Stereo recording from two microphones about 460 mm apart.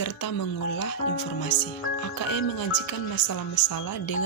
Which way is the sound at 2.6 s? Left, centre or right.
Left.